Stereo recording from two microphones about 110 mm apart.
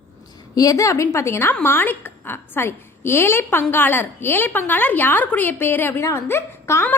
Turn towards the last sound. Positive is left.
turn(degrees=25)  # may be behind; listen again after turning